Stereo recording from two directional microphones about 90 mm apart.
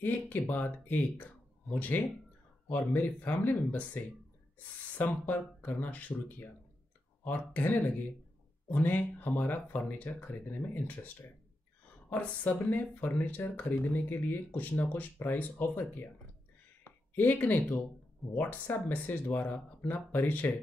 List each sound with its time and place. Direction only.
0.0 s a woman's voice: 20° left (ahead or behind)